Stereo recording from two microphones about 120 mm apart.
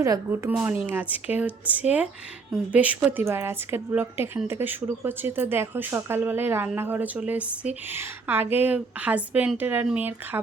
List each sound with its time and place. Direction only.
0.6 s speech: 15° right (ahead or behind)